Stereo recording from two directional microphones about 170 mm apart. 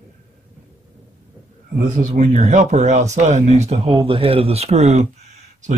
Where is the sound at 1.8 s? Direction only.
45° right (ahead or behind).